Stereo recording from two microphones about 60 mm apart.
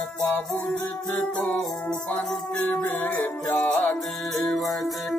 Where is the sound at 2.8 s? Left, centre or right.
Left.